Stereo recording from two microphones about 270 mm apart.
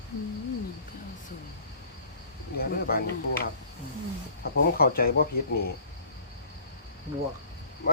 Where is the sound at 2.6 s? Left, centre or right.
Left.